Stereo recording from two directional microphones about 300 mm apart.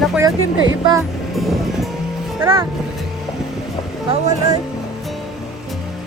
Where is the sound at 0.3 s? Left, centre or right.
Right.